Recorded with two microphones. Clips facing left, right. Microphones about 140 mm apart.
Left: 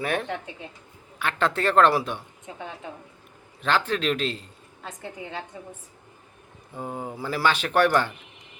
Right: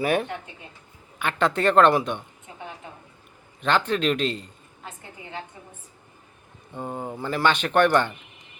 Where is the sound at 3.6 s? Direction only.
5° left (ahead or behind).